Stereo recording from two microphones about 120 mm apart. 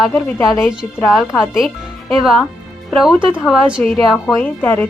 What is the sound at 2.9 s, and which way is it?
A woman's voice, centre (ahead or behind).